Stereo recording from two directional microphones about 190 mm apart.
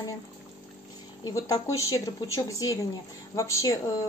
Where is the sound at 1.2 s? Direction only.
15° left (ahead or behind).